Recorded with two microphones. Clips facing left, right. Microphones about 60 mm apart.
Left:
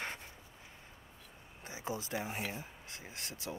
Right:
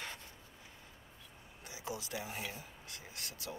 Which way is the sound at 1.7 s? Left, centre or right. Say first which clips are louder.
Left 3 dB; left.